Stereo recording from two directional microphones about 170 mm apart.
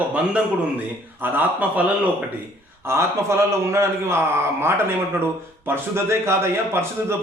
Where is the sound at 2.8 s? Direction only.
15° right (ahead or behind).